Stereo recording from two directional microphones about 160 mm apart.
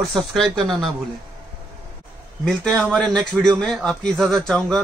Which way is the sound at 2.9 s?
5° left (ahead or behind).